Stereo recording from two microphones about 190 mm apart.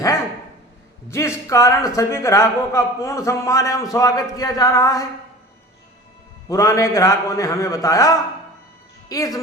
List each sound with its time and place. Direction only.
1.1 s a man's voice: 15° left (ahead or behind)
6.5 s a man's voice: 15° left (ahead or behind)